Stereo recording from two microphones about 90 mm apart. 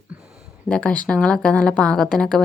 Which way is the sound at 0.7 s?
15° left (ahead or behind).